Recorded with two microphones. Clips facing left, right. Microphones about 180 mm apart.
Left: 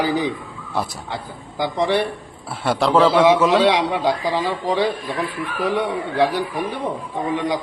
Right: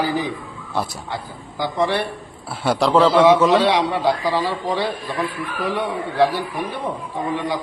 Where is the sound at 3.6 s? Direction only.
20° left (ahead or behind).